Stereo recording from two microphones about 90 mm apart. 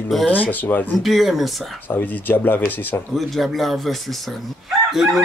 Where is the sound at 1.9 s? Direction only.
20° left (ahead or behind).